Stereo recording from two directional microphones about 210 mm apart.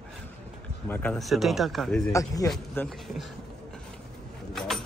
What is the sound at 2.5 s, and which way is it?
Speech, centre (ahead or behind).